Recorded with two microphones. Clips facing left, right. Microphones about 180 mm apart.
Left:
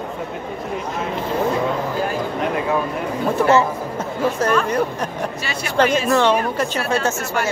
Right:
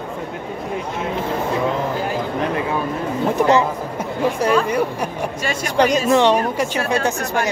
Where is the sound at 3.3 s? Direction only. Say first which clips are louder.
Even; 15° right (ahead or behind).